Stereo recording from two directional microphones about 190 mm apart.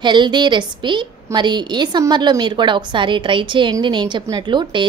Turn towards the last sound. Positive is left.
turn(degrees=-25)  # may be behind; listen again after turning